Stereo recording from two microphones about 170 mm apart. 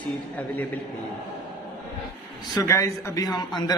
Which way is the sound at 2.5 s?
20° left (ahead or behind).